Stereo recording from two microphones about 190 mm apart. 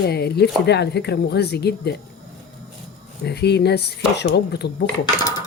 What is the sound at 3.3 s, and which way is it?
Speech, 60° left (ahead or behind).